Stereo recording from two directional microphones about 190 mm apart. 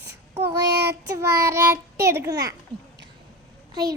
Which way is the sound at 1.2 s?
15° right (ahead or behind).